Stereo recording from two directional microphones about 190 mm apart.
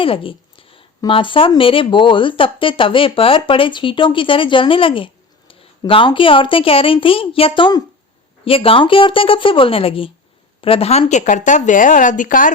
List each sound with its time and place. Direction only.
0.0 s a woman's voice: 30° left (ahead or behind); by 12.5 s 45° left (ahead or behind)